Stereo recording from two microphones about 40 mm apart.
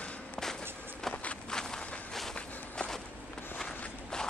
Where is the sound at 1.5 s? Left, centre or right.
Centre.